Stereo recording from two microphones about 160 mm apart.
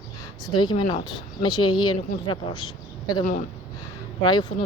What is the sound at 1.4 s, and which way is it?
Speech, 30° left (ahead or behind).